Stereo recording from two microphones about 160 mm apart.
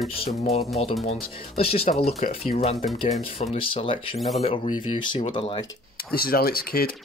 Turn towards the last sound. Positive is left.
turn(degrees=70)  # may be behind; listen again after turning